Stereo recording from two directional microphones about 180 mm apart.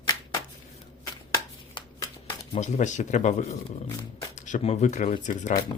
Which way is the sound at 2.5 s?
40° left (ahead or behind).